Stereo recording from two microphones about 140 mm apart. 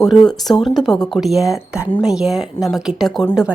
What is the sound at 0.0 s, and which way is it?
A woman's voice, 5° left (ahead or behind).